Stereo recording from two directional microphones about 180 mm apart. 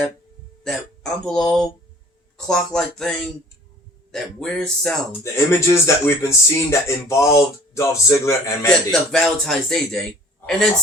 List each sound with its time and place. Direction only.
0.6 s speech: 5° left (ahead or behind)
5.2 s speech: 15° left (ahead or behind)
8.9 s speech: 5° left (ahead or behind)